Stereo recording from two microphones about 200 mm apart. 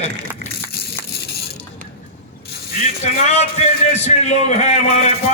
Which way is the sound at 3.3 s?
35° left (ahead or behind).